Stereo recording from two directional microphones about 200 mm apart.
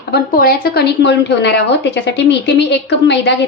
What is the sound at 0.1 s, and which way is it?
A woman's voice, 50° left (ahead or behind).